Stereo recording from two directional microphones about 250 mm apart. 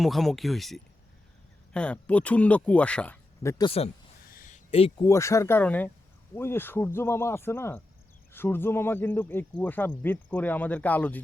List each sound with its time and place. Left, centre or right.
0.0 s speech: centre
3.6 s speech: left
4.3 s a sound: left
5.0 s speech: centre